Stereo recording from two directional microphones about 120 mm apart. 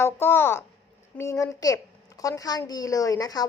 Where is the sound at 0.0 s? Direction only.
20° left (ahead or behind).